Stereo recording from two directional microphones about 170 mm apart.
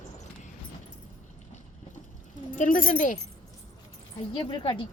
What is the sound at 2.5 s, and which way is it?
Speech, 50° left (ahead or behind).